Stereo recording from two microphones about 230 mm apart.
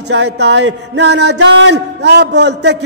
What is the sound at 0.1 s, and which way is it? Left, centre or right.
A man's voice, right.